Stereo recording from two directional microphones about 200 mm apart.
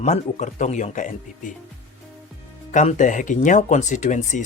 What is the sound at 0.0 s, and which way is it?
Speech, 35° left (ahead or behind).